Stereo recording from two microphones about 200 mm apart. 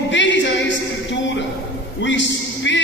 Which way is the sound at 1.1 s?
65° left (ahead or behind).